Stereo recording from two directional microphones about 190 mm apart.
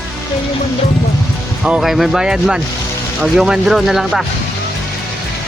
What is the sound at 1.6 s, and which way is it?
Speech, centre (ahead or behind).